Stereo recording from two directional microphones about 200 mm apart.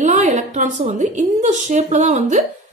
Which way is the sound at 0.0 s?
35° right (ahead or behind).